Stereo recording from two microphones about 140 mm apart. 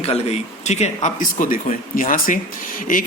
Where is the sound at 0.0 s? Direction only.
50° left (ahead or behind).